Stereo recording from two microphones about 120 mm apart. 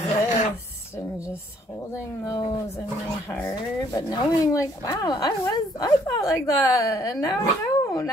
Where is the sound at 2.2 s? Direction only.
35° left (ahead or behind).